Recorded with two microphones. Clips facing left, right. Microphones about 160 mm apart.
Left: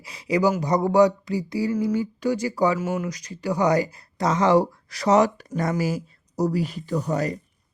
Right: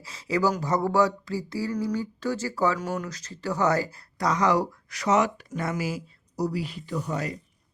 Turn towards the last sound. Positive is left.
turn(degrees=40)  # may be behind; listen again after turning